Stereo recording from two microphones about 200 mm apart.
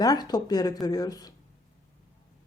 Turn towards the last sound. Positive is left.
turn(degrees=20)  # may be behind; listen again after turning